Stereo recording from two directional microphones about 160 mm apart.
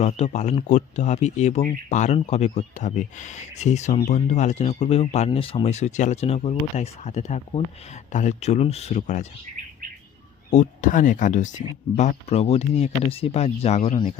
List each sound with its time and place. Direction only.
0.0 s speech: 45° left (ahead or behind)
10.5 s speech: 50° left (ahead or behind)